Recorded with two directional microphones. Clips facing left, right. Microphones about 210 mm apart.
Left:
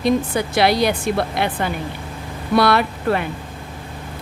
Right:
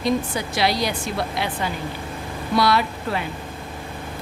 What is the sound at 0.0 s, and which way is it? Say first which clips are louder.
Speech: left 4 dB; 60° left (ahead or behind).